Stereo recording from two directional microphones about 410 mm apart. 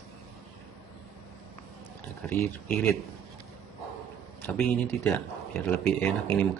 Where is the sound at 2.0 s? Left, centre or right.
Centre.